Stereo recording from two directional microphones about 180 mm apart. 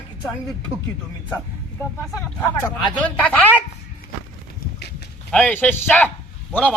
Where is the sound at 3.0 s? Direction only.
5° left (ahead or behind).